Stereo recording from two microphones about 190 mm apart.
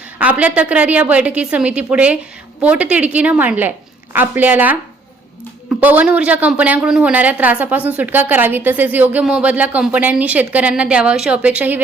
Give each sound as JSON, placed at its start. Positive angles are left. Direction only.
{"t": 0.2, "sound": "speech", "side_deg": -10}